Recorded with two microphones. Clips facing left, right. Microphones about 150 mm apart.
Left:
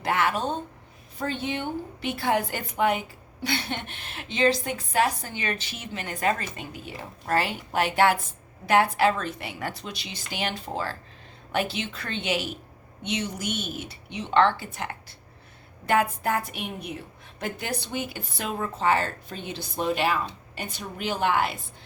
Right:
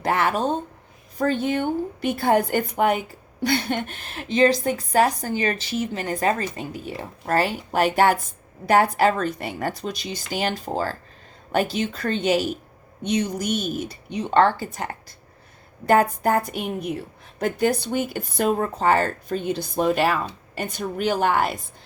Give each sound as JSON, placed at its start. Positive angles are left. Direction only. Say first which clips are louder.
{"t": 0.0, "sound": "a woman's voice", "louder": "right 4 dB", "side_deg": -40}
{"t": 17.9, "sound": "speech", "louder": "right 7 dB", "side_deg": -45}